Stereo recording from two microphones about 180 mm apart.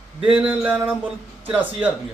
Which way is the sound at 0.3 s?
5° right (ahead or behind).